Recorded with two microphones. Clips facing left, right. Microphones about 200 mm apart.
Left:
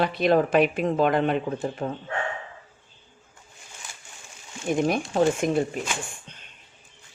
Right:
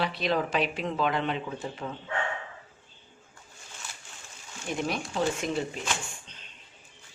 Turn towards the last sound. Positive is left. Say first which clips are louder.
# left 4 dB
turn(degrees=55)  # may be behind; listen again after turning